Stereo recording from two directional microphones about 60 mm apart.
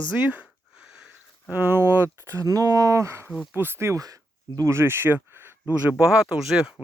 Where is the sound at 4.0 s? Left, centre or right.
Right.